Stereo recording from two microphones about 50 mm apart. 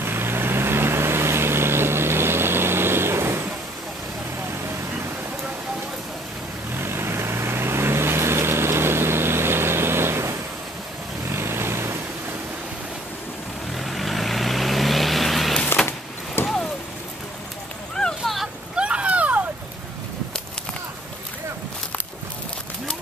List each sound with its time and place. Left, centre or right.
0.0 s vehicle: right
6.8 s vehicle: right
11.3 s vehicle: right
13.7 s vehicle: centre
15.8 s a sound: centre
16.4 s vehicle: left
18.2 s a sound: centre
18.8 s vehicle: right